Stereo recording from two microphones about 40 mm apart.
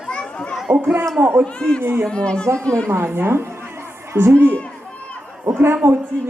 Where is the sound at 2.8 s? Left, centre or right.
Right.